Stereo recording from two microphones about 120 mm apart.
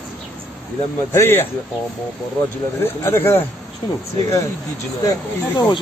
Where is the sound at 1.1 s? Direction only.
20° left (ahead or behind).